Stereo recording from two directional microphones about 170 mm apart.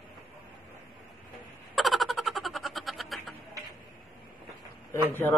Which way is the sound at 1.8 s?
Centre (ahead or behind).